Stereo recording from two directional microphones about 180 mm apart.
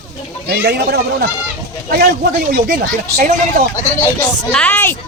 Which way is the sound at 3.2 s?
45° right (ahead or behind).